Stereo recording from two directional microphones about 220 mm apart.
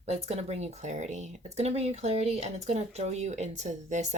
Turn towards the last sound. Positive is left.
turn(degrees=-30)  # may be behind; listen again after turning